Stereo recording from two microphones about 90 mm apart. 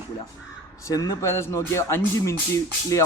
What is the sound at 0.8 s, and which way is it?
Speech, 40° left (ahead or behind).